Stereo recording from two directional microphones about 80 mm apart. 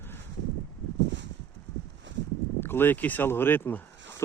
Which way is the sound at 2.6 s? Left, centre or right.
Left.